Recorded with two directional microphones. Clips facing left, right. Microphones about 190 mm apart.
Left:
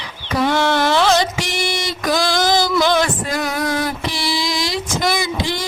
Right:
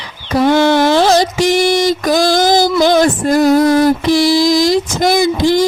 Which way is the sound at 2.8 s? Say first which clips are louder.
Right 7 dB; 40° right (ahead or behind).